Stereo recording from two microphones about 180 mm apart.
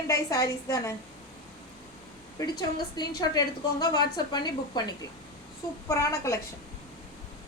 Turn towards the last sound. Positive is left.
turn(degrees=15)  # may be behind; listen again after turning